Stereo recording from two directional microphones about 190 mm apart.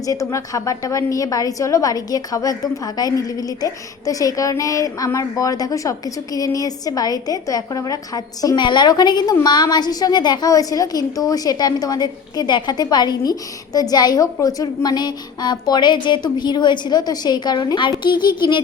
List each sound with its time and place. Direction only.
0.0 s a woman's voice: 20° left (ahead or behind)